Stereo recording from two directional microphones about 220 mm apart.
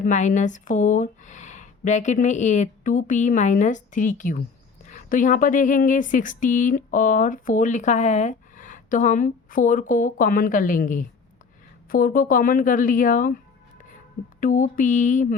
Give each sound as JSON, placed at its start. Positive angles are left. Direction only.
{"t": 0.0, "sound": "speech", "side_deg": 35}
{"t": 14.4, "sound": "speech", "side_deg": 35}